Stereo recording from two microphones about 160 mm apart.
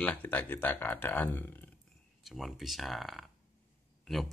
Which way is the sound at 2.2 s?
Centre (ahead or behind).